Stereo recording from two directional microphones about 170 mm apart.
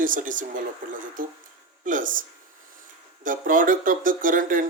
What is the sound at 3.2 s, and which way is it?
Speech, 50° right (ahead or behind).